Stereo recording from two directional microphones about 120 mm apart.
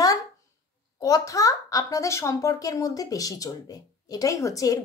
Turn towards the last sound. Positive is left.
turn(degrees=30)  # may be behind; listen again after turning